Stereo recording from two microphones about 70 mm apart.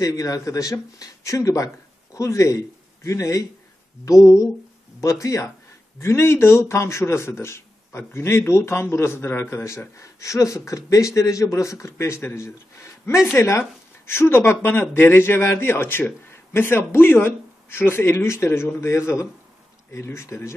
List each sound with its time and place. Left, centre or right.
0.0 s speech: left
9.9 s speech: left